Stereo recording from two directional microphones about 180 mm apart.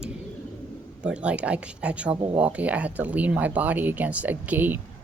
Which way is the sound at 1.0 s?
5° right (ahead or behind).